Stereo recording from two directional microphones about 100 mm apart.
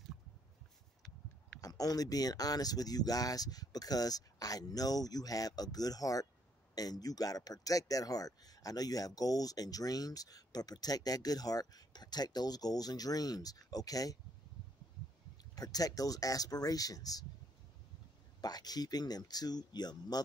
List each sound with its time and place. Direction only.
1.6 s a man's voice: 40° left (ahead or behind)
15.5 s a man's voice: 40° left (ahead or behind)
18.4 s a man's voice: 40° left (ahead or behind)